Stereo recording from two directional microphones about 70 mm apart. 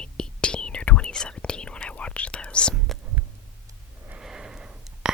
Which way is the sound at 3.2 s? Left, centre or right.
Right.